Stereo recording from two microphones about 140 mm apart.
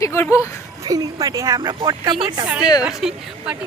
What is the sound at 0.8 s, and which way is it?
Speech, 25° right (ahead or behind).